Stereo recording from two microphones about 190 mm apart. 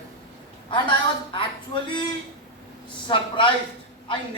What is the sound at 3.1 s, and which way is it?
Speech, 25° left (ahead or behind).